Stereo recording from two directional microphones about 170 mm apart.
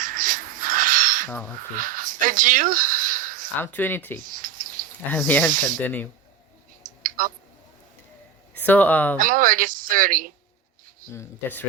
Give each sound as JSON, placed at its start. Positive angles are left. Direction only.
{"t": 0.0, "sound": "a sound", "side_deg": -50}
{"t": 1.7, "sound": "speech", "side_deg": -50}
{"t": 3.6, "sound": "speech", "side_deg": 10}
{"t": 4.2, "sound": "cricket", "side_deg": -55}
{"t": 5.1, "sound": "speech", "side_deg": 10}
{"t": 5.5, "sound": "a woman's voice", "side_deg": -55}
{"t": 5.8, "sound": "speech", "side_deg": 10}
{"t": 6.8, "sound": "clicking", "side_deg": -55}
{"t": 8.5, "sound": "speech", "side_deg": 10}
{"t": 9.1, "sound": "a woman's voice", "side_deg": -55}
{"t": 11.1, "sound": "speech", "side_deg": 15}